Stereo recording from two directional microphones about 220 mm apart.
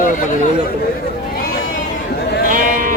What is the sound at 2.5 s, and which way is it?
Sheep, 40° right (ahead or behind).